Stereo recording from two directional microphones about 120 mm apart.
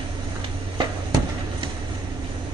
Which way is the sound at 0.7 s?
40° right (ahead or behind).